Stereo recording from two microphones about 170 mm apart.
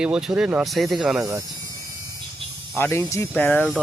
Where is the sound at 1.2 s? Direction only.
20° right (ahead or behind).